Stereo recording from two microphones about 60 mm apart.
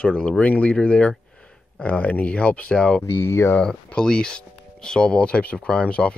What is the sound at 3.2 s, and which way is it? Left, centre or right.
Speech, left.